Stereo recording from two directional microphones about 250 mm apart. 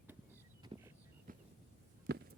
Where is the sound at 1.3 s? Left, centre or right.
Right.